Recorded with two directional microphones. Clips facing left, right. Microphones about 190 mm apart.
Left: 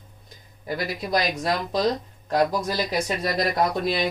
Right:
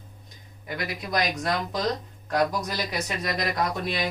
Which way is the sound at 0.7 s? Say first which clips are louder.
Left 4 dB; 30° left (ahead or behind).